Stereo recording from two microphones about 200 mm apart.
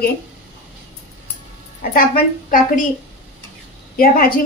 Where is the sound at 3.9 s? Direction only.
45° left (ahead or behind).